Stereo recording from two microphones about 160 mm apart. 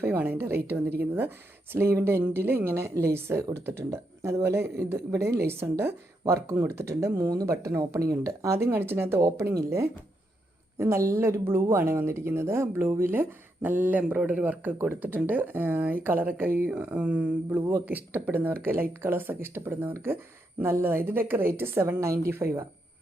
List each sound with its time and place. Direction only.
0.0 s speech: 10° right (ahead or behind)